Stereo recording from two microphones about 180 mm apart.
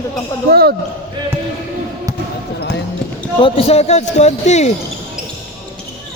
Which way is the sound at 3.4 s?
35° left (ahead or behind).